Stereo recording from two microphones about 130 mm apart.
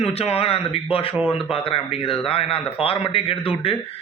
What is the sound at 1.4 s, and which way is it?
A man's voice, 45° left (ahead or behind).